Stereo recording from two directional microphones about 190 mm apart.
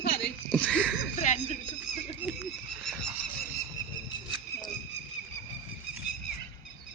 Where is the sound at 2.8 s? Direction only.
5° left (ahead or behind).